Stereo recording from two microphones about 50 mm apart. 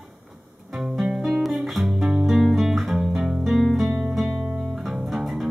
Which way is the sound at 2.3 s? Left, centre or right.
Centre.